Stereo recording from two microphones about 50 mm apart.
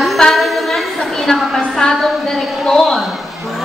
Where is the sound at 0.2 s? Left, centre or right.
Centre.